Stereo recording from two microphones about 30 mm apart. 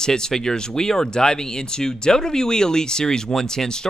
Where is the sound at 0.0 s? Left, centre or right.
Left.